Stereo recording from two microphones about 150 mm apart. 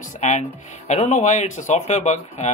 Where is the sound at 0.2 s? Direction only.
50° left (ahead or behind).